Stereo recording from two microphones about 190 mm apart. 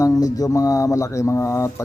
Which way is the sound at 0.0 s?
20° left (ahead or behind).